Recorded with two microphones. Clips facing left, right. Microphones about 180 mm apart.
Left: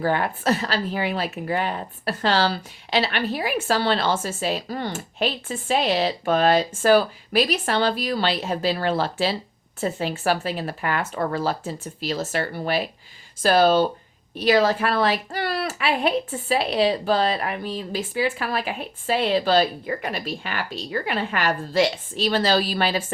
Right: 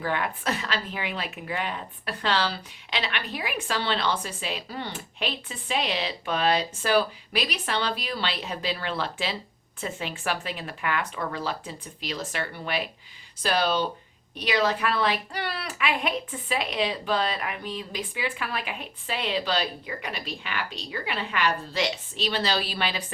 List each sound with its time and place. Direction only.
0.0 s speech: 40° left (ahead or behind)